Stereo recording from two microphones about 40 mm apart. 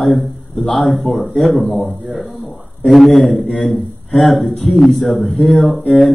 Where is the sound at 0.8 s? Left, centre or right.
Centre.